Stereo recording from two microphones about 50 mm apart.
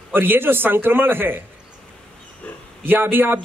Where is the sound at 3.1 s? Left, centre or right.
Right.